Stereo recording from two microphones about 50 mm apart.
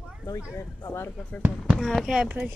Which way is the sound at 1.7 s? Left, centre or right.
Centre.